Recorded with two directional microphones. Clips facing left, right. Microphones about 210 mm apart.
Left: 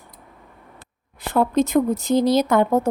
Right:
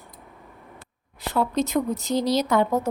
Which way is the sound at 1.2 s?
50° left (ahead or behind).